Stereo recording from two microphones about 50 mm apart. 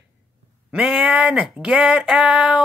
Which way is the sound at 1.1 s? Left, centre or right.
Centre.